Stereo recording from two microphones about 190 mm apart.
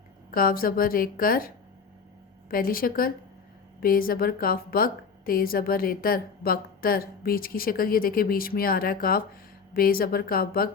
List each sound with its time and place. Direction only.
0.3 s a woman's voice: 50° left (ahead or behind)